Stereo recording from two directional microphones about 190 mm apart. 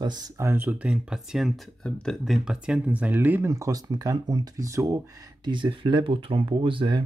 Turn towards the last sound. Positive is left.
turn(degrees=-25)  # may be behind; listen again after turning